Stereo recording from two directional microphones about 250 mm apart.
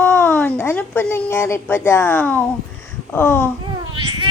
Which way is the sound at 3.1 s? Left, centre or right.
Centre.